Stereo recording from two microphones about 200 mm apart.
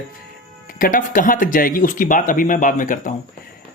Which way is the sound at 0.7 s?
45° left (ahead or behind).